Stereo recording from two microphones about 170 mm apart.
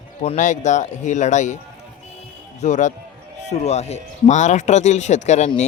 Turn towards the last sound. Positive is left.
turn(degrees=45)  # may be behind; listen again after turning